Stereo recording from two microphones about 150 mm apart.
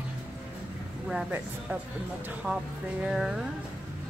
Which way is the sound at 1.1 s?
5° right (ahead or behind).